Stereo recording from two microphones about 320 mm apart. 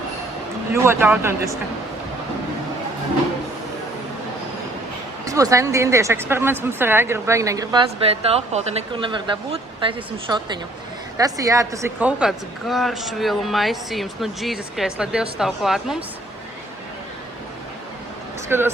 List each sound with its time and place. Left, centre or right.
0.7 s speech: centre
5.2 s speech: centre
18.4 s speech: centre